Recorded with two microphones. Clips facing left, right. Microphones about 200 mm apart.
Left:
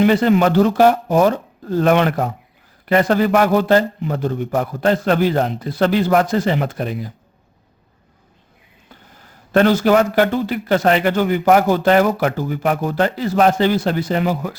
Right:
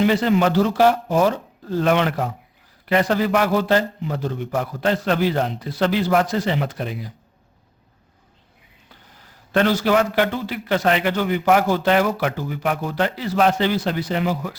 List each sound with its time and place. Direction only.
0.0 s speech: 55° left (ahead or behind)
8.9 s speech: 45° left (ahead or behind)